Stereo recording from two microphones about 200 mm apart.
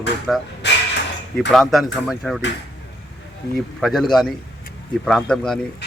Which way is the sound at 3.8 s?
Centre (ahead or behind).